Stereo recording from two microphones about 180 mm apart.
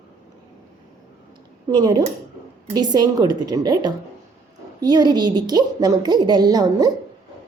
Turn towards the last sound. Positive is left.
turn(degrees=-20)  # may be behind; listen again after turning